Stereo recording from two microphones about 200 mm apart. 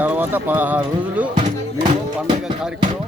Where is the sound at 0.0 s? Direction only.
10° right (ahead or behind).